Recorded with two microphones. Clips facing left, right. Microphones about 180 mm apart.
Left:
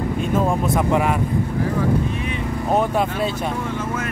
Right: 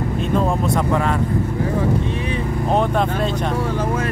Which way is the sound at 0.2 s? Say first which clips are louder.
Right 1 dB; centre (ahead or behind).